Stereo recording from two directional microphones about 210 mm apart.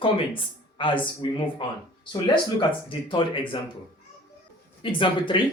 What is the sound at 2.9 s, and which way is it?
Speech, 25° left (ahead or behind).